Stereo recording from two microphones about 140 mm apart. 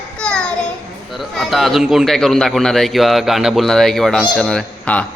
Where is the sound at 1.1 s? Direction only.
Centre (ahead or behind).